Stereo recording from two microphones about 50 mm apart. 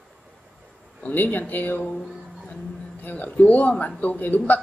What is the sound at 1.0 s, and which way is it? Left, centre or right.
Speech, left.